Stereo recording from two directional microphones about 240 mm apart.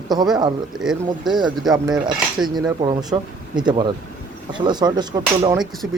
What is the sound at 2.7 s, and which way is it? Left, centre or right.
Speech, centre.